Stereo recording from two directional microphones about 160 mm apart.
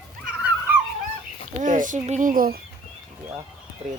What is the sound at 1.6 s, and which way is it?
Speech, 55° right (ahead or behind).